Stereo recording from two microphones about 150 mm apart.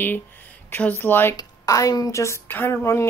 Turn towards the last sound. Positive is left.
turn(degrees=20)  # may be behind; listen again after turning